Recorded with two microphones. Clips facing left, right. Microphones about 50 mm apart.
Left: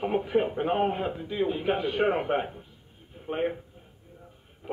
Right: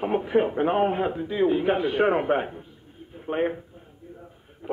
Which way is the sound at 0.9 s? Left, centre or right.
Centre.